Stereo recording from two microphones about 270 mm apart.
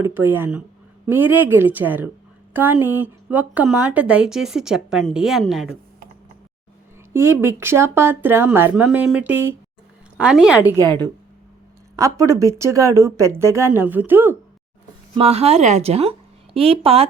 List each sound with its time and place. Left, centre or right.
0.0 s speech: centre
7.1 s speech: centre
10.7 s speech: centre
15.1 s speech: right